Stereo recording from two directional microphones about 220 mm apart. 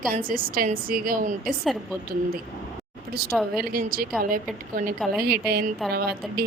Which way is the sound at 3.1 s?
45° right (ahead or behind).